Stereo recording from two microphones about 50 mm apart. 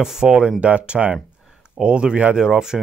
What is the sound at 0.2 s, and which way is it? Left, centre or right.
Speech, centre.